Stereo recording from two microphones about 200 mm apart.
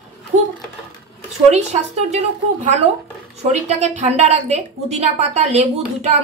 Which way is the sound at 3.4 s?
35° right (ahead or behind).